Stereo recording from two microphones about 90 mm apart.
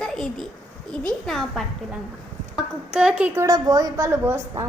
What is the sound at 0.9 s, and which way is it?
Speech, 10° left (ahead or behind).